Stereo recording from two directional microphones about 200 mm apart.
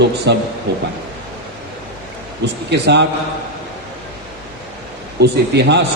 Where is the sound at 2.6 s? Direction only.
60° right (ahead or behind).